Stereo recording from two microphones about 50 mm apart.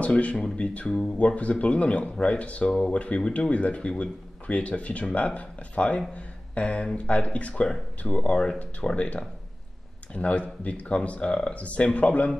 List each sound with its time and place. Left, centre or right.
0.0 s speech: left